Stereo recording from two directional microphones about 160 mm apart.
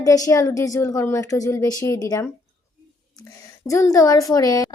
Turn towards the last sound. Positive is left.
turn(degrees=25)  # may be behind; listen again after turning